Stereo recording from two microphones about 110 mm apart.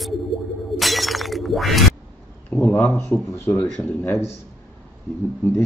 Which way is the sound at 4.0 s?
20° left (ahead or behind).